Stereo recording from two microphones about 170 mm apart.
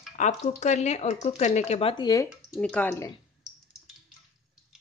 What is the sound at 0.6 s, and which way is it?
Speech, 40° left (ahead or behind).